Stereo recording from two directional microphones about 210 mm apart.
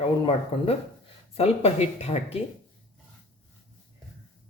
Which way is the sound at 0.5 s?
25° left (ahead or behind).